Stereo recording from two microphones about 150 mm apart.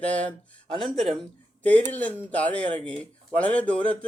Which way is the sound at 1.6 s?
10° left (ahead or behind).